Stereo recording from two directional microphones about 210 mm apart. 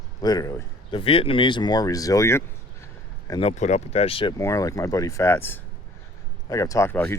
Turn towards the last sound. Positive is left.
turn(degrees=10)  # may be behind; listen again after turning